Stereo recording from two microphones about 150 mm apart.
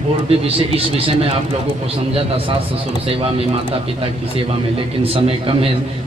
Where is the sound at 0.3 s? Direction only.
40° right (ahead or behind).